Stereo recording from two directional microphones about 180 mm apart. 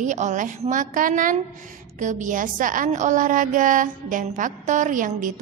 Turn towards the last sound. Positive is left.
turn(degrees=-45)  # may be behind; listen again after turning